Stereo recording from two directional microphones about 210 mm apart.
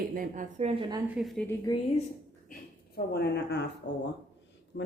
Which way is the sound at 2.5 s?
50° left (ahead or behind).